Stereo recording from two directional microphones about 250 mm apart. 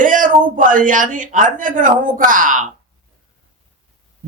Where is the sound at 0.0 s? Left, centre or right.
Right.